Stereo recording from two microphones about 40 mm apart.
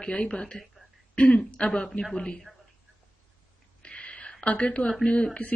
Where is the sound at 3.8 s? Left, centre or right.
Left.